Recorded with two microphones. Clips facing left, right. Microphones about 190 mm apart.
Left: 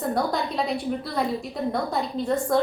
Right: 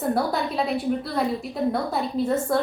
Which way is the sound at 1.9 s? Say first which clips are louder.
Right 2 dB; 5° right (ahead or behind).